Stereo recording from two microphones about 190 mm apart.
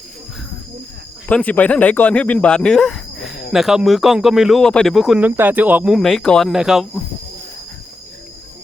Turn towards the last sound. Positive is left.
turn(degrees=0)  # may be behind; listen again after turning